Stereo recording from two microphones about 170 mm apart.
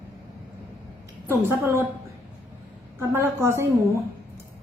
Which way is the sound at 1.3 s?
15° right (ahead or behind).